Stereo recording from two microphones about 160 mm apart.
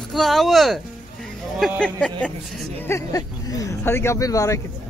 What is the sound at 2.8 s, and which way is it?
Speech, 20° left (ahead or behind).